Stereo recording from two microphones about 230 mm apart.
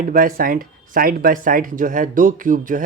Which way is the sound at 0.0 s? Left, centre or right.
Right.